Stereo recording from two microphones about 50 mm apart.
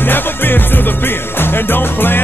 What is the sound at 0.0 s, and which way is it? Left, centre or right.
Music, left.